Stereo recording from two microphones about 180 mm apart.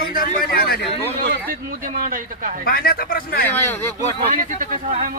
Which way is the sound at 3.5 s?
10° left (ahead or behind).